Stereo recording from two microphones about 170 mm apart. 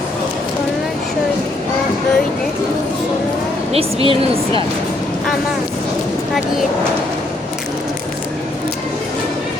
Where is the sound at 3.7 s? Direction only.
35° right (ahead or behind).